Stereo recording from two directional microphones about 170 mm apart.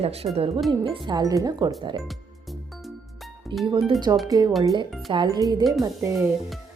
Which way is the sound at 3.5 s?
30° right (ahead or behind).